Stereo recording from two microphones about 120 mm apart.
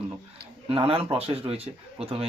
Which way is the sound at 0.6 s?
50° right (ahead or behind).